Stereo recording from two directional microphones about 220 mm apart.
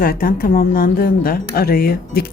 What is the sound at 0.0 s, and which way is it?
Speech, 40° left (ahead or behind).